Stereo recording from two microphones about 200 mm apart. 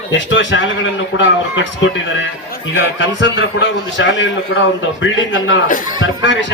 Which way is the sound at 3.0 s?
65° left (ahead or behind).